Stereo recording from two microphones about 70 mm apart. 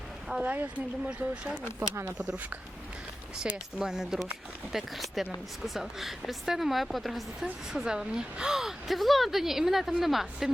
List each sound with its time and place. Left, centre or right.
0.3 s a woman's voice: centre
0.5 s speech: right
2.1 s speech: centre
3.4 s a woman's voice: centre